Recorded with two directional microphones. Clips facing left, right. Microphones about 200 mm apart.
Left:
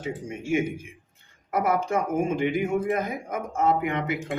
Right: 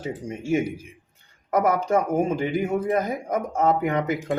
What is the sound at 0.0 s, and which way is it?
Speech, 35° right (ahead or behind).